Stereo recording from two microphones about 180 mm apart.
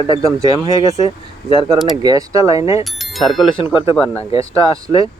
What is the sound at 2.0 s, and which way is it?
Speech, 20° right (ahead or behind).